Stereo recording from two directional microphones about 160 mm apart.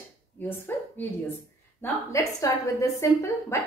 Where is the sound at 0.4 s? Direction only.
15° left (ahead or behind).